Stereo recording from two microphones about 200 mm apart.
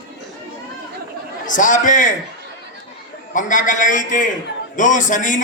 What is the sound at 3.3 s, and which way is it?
A man's voice, 40° left (ahead or behind).